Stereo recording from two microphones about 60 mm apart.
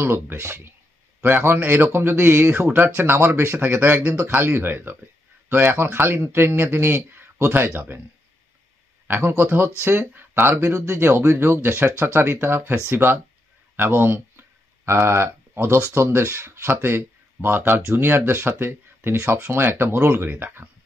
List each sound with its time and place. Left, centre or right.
0.0 s speech: right
9.0 s speech: right
11.0 s speech: right